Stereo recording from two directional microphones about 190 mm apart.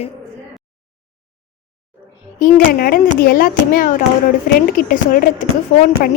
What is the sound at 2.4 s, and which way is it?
A woman's voice, 50° left (ahead or behind).